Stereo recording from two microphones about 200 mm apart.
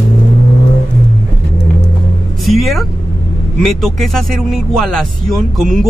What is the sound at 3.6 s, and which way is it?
Speech, centre (ahead or behind).